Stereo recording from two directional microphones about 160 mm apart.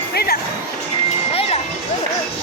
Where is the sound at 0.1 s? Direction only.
80° left.